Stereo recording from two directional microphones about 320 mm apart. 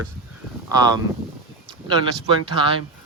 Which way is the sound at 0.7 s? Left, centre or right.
Centre.